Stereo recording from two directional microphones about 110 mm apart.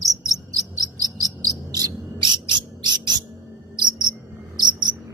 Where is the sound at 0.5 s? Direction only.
35° right (ahead or behind).